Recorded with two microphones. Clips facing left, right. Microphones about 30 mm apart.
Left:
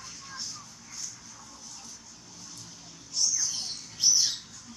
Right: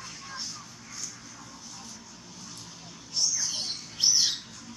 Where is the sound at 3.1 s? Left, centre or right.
Right.